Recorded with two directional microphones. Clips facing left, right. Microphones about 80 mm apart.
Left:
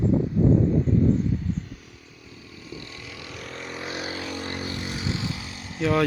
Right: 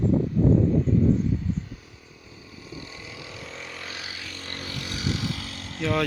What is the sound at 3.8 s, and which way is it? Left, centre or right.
Vehicle, left.